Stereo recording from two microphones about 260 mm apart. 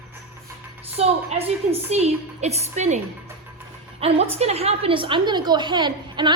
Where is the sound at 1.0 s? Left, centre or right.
Right.